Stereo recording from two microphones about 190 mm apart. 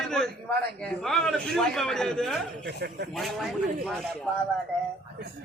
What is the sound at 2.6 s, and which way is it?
Speech, 60° right (ahead or behind).